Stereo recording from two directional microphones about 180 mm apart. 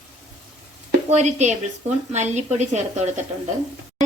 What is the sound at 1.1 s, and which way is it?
A woman's voice, 40° right (ahead or behind).